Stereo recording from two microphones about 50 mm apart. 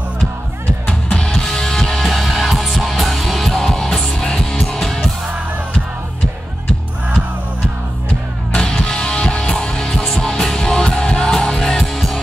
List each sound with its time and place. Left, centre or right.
1.1 s music: centre
8.5 s music: centre